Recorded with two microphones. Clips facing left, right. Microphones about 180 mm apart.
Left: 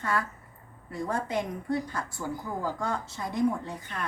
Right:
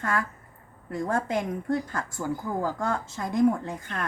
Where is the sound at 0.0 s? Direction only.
50° right (ahead or behind).